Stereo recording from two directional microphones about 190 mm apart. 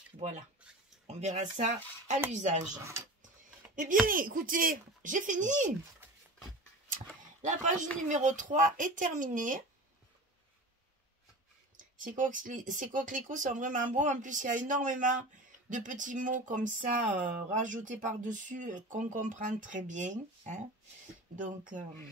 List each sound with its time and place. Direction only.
1.0 s speech: 35° right (ahead or behind)
4.1 s speech: 45° right (ahead or behind)
6.9 s a sound: 40° right (ahead or behind)
8.1 s speech: 40° right (ahead or behind)
11.7 s speech: 45° right (ahead or behind)